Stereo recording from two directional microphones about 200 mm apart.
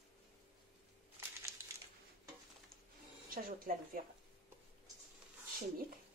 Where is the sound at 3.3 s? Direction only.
45° right (ahead or behind).